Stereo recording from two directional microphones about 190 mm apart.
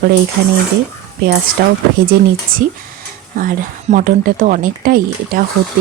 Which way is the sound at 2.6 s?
45° right (ahead or behind).